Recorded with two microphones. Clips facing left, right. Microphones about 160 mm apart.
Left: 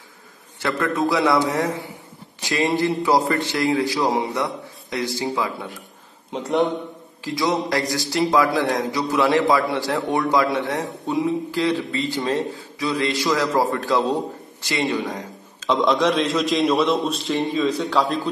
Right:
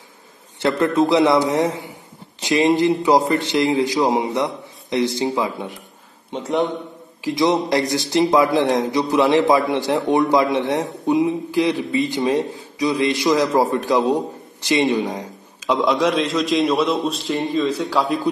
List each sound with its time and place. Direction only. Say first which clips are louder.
0.6 s a man's voice: right 5 dB; 25° right (ahead or behind)
6.3 s a man's voice: even; centre (ahead or behind)
7.2 s a man's voice: right 4 dB; 20° right (ahead or behind); by 18.2 s centre (ahead or behind)